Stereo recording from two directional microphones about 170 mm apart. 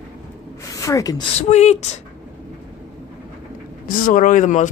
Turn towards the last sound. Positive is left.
turn(degrees=50)  # may be behind; listen again after turning